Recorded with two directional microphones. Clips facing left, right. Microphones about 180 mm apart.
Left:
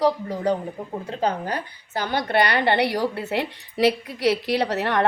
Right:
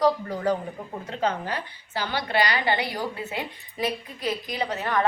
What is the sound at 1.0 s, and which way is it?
A woman's voice, 35° left (ahead or behind).